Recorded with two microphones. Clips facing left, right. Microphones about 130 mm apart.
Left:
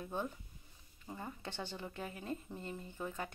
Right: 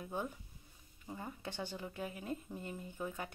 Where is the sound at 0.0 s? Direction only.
10° right (ahead or behind).